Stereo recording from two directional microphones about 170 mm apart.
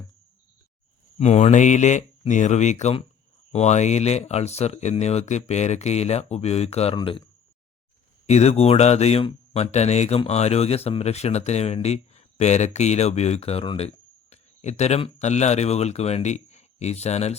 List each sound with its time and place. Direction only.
1.2 s speech: 40° left (ahead or behind)
8.3 s speech: 40° left (ahead or behind)